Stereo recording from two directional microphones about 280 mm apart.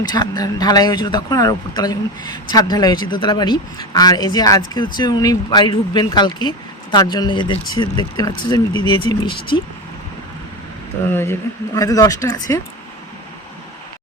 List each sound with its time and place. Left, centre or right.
0.0 s speech: centre
11.1 s speech: centre